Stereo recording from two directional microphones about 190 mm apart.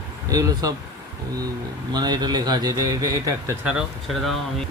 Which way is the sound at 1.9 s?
20° right (ahead or behind).